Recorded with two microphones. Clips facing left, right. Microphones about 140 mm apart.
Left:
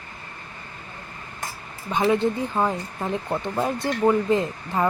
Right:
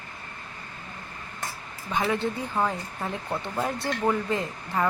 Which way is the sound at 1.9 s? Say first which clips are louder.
Left 6 dB; 20° left (ahead or behind).